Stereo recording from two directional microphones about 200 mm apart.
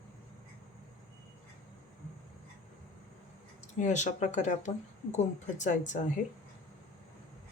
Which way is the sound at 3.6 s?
35° left (ahead or behind).